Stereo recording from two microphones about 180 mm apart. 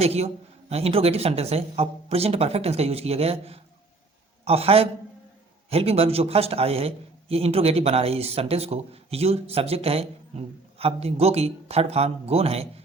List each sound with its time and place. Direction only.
0.0 s a man's voice: 35° right (ahead or behind)